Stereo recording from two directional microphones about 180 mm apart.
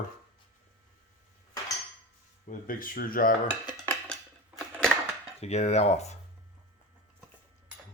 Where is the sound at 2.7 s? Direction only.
50° left (ahead or behind).